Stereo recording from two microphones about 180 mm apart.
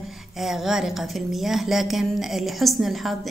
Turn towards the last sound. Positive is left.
turn(degrees=0)  # may be behind; listen again after turning